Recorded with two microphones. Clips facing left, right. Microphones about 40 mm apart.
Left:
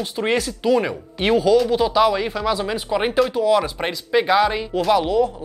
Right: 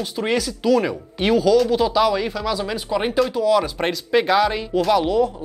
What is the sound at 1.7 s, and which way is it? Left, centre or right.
Speech, centre.